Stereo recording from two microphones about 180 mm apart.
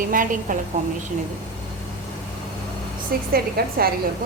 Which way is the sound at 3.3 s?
55° right (ahead or behind).